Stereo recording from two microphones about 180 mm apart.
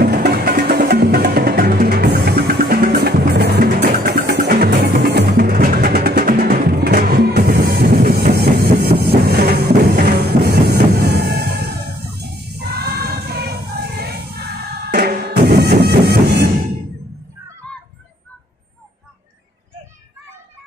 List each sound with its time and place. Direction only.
0.0 s music: 60° right (ahead or behind)